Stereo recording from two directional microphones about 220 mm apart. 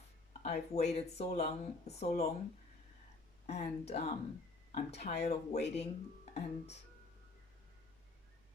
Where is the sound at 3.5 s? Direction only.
30° left (ahead or behind).